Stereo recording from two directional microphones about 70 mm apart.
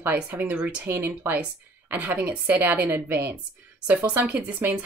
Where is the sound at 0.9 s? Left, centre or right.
Right.